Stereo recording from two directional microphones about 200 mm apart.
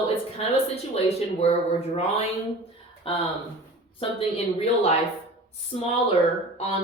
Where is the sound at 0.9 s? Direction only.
30° left (ahead or behind).